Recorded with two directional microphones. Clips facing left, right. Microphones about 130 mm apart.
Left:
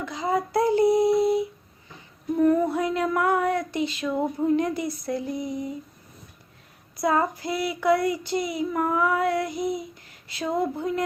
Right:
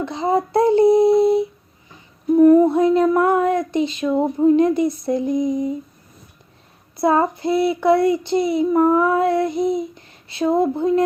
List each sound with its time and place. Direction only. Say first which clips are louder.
0.0 s child singing: right 6 dB; 25° right (ahead or behind)
2.3 s female singing: right 9 dB; 20° right (ahead or behind)
2.6 s child singing: right 10 dB; 25° right (ahead or behind)
6.9 s child singing: right 6 dB; 25° right (ahead or behind)